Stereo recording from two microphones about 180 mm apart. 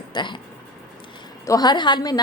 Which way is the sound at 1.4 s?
20° left (ahead or behind).